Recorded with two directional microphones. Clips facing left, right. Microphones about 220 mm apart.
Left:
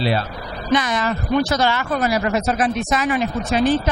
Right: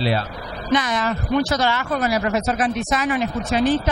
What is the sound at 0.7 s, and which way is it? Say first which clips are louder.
Speech: left 1 dB; 10° left (ahead or behind).